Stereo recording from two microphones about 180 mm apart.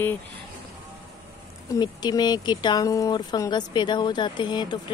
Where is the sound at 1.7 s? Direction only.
25° left (ahead or behind).